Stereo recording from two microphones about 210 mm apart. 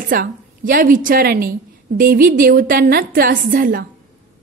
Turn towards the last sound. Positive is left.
turn(degrees=-45)  # may be behind; listen again after turning